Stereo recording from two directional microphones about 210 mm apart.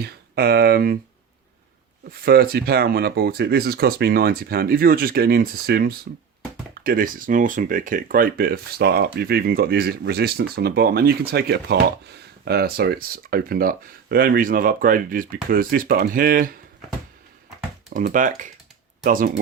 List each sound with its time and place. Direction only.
0.0 s speech: 50° right (ahead or behind)
2.2 s speech: 45° right (ahead or behind)
17.8 s speech: 40° right (ahead or behind)